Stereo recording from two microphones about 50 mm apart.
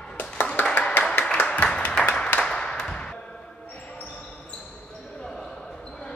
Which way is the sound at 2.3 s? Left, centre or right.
Centre.